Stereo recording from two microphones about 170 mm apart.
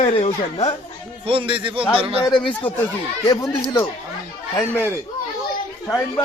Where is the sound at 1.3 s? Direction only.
30° right (ahead or behind).